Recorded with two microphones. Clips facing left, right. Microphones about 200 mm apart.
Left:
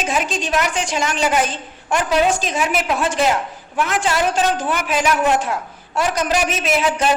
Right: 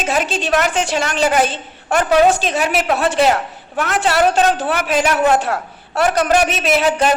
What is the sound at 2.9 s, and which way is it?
A woman's voice, 65° right (ahead or behind).